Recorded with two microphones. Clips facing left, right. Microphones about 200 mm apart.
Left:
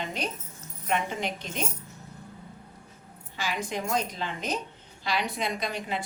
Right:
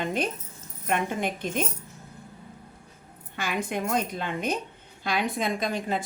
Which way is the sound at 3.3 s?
55° right (ahead or behind).